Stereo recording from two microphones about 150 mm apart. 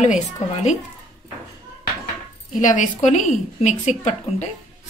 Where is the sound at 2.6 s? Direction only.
55° left (ahead or behind).